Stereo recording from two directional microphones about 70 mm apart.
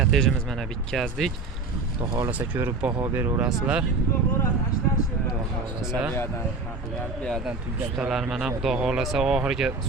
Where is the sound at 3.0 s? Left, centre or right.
Right.